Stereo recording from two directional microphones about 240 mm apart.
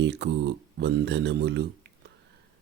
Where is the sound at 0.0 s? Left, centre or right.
Right.